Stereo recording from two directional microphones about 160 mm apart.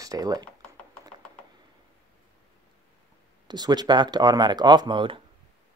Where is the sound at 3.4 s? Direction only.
25° right (ahead or behind).